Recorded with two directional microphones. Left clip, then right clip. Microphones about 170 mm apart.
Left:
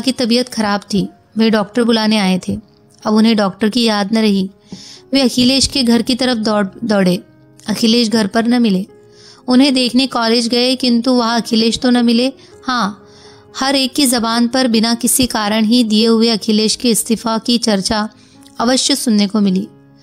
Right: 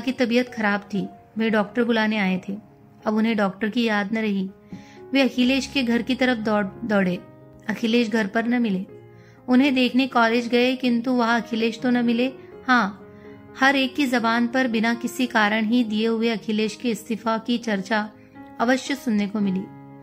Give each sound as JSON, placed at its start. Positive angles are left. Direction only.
{"t": 0.0, "sound": "speech", "side_deg": 45}